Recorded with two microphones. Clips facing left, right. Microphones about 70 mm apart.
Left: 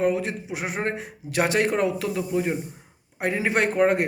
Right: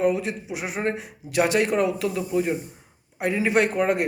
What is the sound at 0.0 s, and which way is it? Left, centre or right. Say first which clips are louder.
A man's voice: right 1 dB; left.